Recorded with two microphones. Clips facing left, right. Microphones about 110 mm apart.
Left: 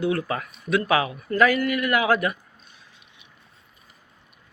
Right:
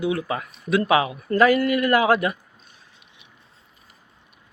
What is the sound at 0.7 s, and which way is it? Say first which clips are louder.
A man's voice: right 2 dB; 25° right (ahead or behind).